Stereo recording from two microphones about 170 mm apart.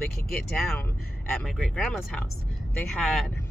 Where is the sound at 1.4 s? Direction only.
5° left (ahead or behind).